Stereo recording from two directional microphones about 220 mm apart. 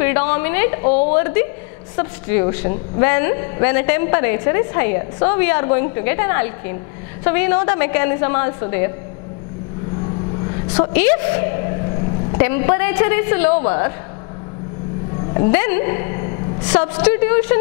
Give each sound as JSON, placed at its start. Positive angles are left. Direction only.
{"t": 0.0, "sound": "a woman's voice", "side_deg": 10}
{"t": 10.8, "sound": "a woman's voice", "side_deg": 10}
{"t": 15.3, "sound": "a woman's voice", "side_deg": 15}
{"t": 16.7, "sound": "a woman's voice", "side_deg": 10}